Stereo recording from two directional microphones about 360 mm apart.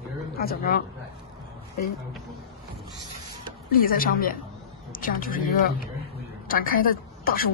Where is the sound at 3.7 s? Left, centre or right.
Left.